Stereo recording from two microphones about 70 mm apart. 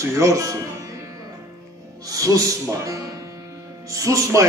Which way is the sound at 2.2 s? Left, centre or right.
Right.